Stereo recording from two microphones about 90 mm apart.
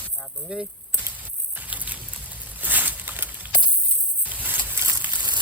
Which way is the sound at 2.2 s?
15° right (ahead or behind).